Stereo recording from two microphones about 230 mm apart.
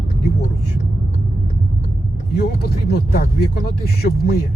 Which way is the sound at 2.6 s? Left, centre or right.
Left.